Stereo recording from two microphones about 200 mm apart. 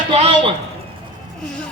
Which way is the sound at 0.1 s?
30° right (ahead or behind).